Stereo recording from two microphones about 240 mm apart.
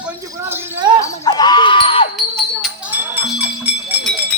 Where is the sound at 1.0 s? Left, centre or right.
Centre.